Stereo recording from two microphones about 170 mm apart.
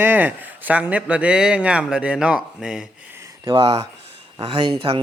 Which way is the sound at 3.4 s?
25° right (ahead or behind).